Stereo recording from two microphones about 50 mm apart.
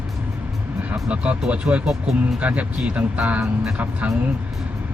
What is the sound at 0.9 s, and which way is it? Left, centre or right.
Speech, right.